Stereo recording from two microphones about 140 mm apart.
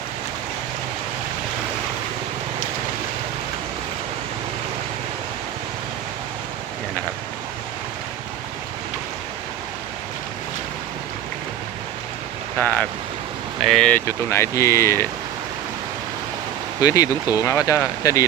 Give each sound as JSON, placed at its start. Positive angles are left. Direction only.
{"t": 12.5, "sound": "speech", "side_deg": 10}
{"t": 16.8, "sound": "speech", "side_deg": 25}